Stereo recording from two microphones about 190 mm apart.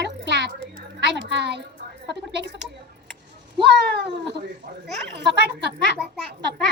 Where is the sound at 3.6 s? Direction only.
60° right (ahead or behind).